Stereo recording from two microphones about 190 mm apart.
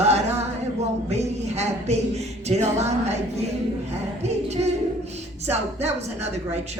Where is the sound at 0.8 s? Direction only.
35° right (ahead or behind).